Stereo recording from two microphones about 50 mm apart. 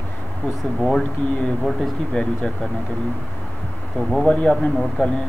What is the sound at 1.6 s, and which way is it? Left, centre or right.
Speech, centre.